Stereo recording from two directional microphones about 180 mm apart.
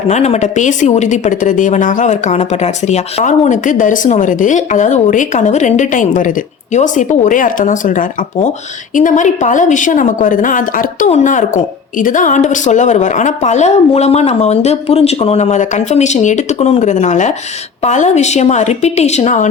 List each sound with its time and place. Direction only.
0.1 s a woman's voice: 40° left (ahead or behind)